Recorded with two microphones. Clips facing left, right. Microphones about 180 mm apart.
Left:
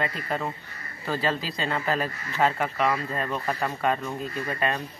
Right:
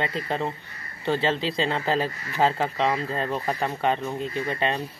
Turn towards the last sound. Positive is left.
turn(degrees=-25)  # may be behind; listen again after turning